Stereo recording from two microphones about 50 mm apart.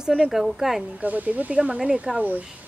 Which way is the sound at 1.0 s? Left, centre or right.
Right.